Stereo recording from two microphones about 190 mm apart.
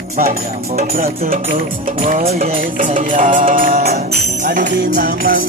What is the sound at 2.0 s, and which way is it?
Music, 35° right (ahead or behind).